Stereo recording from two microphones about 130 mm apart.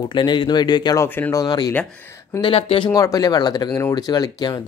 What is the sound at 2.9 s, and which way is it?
Speech, 25° left (ahead or behind).